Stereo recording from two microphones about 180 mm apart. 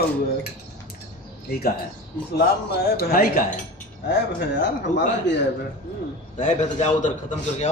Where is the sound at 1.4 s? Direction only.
60° left (ahead or behind).